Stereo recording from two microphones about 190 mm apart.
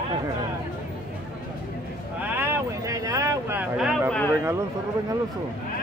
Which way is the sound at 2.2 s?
10° right (ahead or behind).